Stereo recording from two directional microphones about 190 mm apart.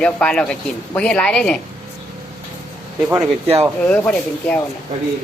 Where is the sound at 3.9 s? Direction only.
5° left (ahead or behind).